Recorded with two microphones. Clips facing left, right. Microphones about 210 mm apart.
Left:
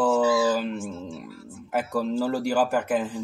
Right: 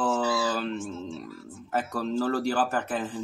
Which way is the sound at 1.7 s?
10° left (ahead or behind).